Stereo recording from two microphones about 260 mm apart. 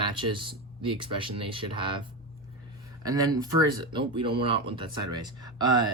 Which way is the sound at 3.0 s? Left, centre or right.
Centre.